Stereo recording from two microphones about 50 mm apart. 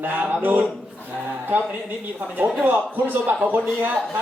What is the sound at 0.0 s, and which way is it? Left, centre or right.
Speech, right.